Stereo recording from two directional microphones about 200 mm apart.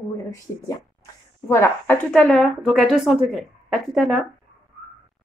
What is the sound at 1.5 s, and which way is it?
Speech, 10° left (ahead or behind).